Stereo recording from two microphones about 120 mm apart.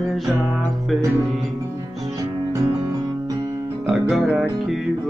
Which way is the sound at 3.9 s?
Centre (ahead or behind).